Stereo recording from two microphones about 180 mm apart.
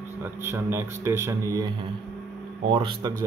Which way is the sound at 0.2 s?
10° right (ahead or behind).